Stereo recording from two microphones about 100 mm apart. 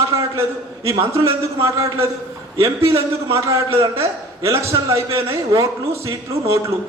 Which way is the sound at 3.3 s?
30° right (ahead or behind).